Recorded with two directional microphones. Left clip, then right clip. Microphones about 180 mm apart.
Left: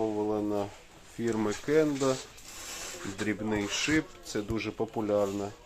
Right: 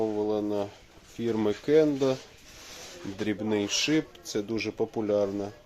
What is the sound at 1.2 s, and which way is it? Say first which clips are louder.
Speech: right 3 dB; 30° right (ahead or behind).